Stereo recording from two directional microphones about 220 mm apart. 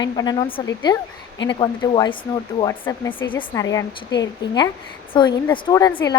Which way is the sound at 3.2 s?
20° left (ahead or behind).